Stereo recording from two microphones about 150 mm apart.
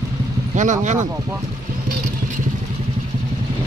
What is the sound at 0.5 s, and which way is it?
Speech, 55° right (ahead or behind).